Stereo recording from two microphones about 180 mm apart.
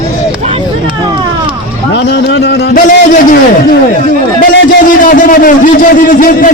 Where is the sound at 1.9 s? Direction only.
70° left (ahead or behind).